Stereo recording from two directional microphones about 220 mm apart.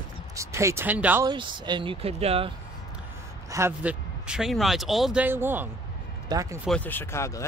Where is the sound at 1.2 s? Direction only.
20° right (ahead or behind).